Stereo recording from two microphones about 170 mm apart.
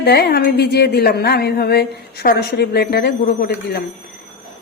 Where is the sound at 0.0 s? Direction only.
70° left (ahead or behind).